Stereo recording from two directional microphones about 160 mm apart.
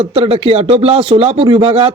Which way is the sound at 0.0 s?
35° right (ahead or behind).